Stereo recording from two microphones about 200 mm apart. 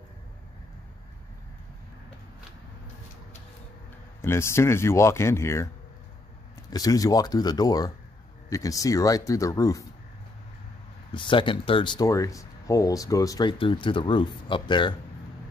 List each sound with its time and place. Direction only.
4.2 s speech: 10° left (ahead or behind)
6.7 s speech: 20° left (ahead or behind)
11.1 s speech: 25° left (ahead or behind)